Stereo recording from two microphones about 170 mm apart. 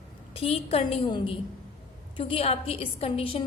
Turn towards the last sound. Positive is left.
turn(degrees=30)  # may be behind; listen again after turning